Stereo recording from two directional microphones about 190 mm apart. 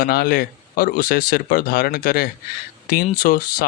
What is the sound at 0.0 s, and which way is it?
Speech, 50° left (ahead or behind).